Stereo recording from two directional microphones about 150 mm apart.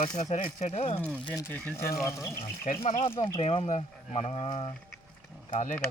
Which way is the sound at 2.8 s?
45° left (ahead or behind).